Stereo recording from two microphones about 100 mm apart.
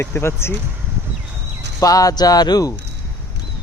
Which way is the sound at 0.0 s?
25° left (ahead or behind).